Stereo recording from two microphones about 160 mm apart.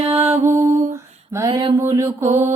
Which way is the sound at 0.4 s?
15° right (ahead or behind).